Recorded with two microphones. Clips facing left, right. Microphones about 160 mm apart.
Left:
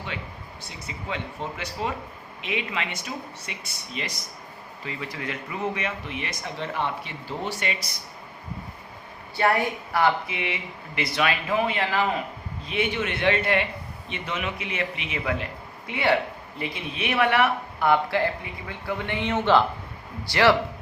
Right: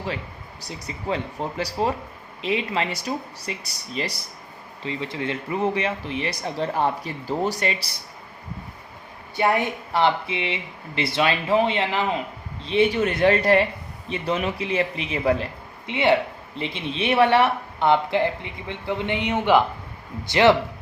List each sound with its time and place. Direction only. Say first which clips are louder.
0.6 s speech: right 6 dB; 40° right (ahead or behind)
9.3 s speech: right 1 dB; 20° right (ahead or behind); by 15.4 s 35° right (ahead or behind)
15.9 s speech: right 3 dB; 25° right (ahead or behind)